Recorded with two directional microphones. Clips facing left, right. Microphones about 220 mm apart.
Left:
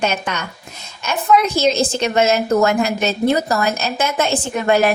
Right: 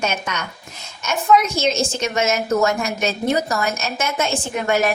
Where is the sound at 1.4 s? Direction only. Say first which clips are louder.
Left 4 dB; 35° left (ahead or behind).